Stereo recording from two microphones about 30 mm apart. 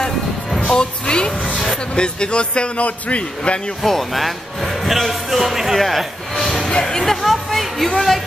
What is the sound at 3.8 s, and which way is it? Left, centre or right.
Speech, centre.